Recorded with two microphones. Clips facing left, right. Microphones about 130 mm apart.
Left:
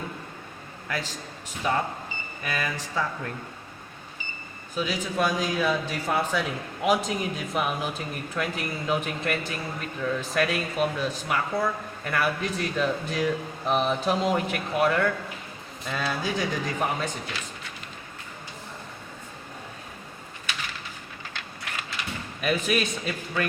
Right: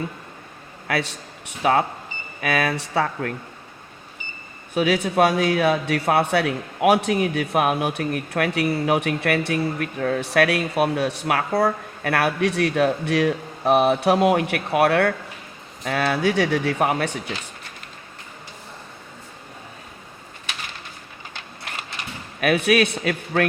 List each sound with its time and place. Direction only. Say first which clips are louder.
0.9 s a man's voice: right 7 dB; 75° right (ahead or behind)
4.7 s a man's voice: right 8 dB; 65° right (ahead or behind)
22.4 s a man's voice: right 7 dB; 70° right (ahead or behind)